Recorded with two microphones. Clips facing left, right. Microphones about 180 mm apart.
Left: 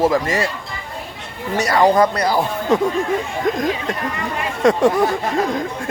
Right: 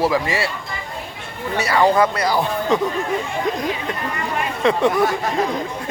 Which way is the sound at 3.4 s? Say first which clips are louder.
Left 3 dB; 45° left (ahead or behind).